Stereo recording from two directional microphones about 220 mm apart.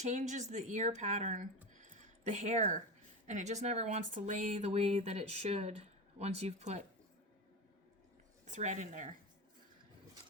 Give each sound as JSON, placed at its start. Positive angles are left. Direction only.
{"t": 0.0, "sound": "speech", "side_deg": -35}
{"t": 1.8, "sound": "a sound", "side_deg": -35}
{"t": 3.2, "sound": "speech", "side_deg": -30}
{"t": 8.4, "sound": "speech", "side_deg": -35}